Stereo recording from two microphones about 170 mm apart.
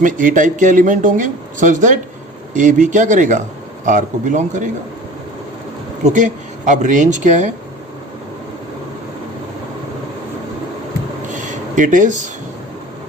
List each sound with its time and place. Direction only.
0.0 s speech: 50° right (ahead or behind)
6.1 s speech: 45° right (ahead or behind)
11.3 s a sound: 50° right (ahead or behind)